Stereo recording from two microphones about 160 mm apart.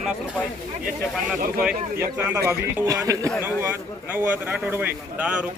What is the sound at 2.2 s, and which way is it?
A man's voice, 15° right (ahead or behind).